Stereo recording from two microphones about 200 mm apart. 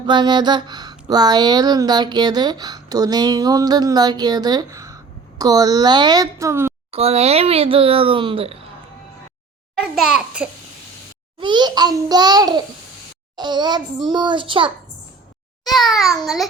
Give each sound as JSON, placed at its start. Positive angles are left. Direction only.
{"t": 0.0, "sound": "speech", "side_deg": -20}
{"t": 6.9, "sound": "speech", "side_deg": -30}
{"t": 10.0, "sound": "a child's voice", "side_deg": -5}
{"t": 11.3, "sound": "a child's voice", "side_deg": -20}
{"t": 15.6, "sound": "a child's voice", "side_deg": 0}